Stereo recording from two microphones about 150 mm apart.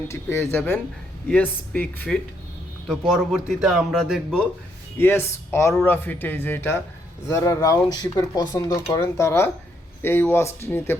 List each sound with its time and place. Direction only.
0.1 s speech: 15° left (ahead or behind)
2.9 s speech: centre (ahead or behind)
4.9 s speech: 15° left (ahead or behind)